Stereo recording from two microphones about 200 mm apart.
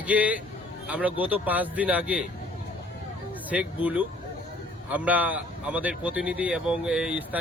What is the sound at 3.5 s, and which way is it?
Speech, 5° right (ahead or behind).